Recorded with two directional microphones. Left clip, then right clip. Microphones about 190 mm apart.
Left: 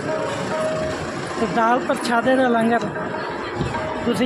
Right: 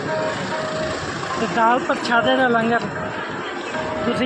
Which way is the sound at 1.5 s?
10° left (ahead or behind).